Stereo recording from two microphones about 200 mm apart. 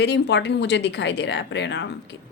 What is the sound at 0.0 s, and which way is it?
A woman's voice, 60° left (ahead or behind).